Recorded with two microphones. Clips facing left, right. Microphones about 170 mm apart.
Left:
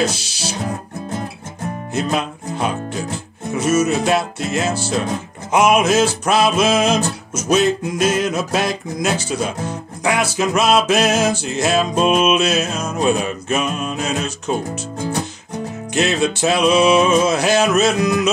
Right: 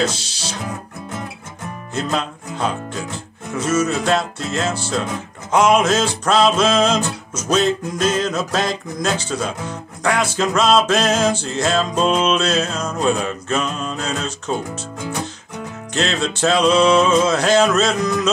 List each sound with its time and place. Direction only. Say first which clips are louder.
0.0 s music: left 1 dB; 10° left (ahead or behind)
2.0 s speech: left 1 dB; 10° left (ahead or behind)
3.8 s music: left 2 dB; 10° left (ahead or behind)
15.0 s music: left 3 dB; 35° left (ahead or behind)
15.9 s music: left 3 dB; 10° left (ahead or behind)